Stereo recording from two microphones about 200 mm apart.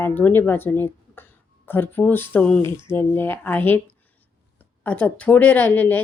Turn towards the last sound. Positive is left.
turn(degrees=10)  # may be behind; listen again after turning